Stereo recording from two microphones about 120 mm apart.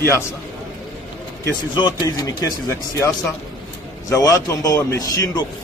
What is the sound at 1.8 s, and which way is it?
A man's voice, 30° left (ahead or behind).